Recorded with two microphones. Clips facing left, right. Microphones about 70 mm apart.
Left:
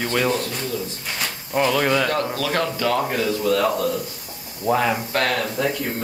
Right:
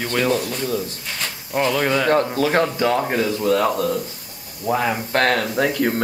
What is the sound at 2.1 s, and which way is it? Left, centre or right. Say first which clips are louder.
Speech: right 5 dB; right.